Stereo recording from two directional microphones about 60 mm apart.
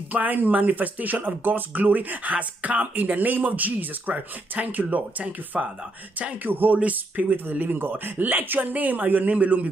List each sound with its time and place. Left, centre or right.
0.1 s speech: right